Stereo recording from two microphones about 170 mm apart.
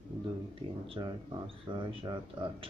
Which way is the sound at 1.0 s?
25° right (ahead or behind).